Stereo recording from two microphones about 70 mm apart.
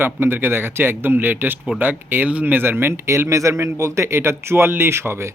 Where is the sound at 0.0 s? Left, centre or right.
Right.